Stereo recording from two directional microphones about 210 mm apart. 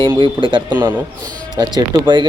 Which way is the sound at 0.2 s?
25° right (ahead or behind).